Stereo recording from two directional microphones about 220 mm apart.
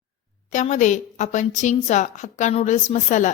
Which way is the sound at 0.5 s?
35° left (ahead or behind).